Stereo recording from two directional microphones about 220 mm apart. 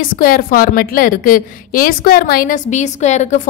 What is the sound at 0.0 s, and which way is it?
A woman's voice, 40° left (ahead or behind).